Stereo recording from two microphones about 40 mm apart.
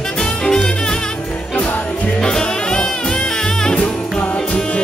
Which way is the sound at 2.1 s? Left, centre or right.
Left.